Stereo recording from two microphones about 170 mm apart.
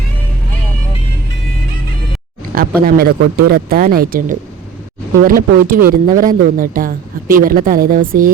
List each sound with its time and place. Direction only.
2.8 s speech: 65° right (ahead or behind)